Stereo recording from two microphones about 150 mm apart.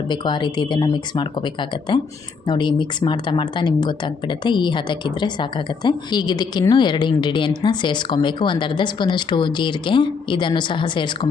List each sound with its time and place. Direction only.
0.1 s speech: 30° left (ahead or behind)